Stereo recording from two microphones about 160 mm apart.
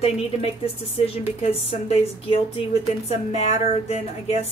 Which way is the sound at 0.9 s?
40° left (ahead or behind).